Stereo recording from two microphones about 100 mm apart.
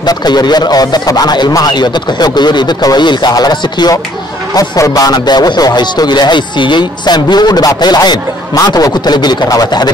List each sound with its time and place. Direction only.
0.0 s speech: 45° left (ahead or behind)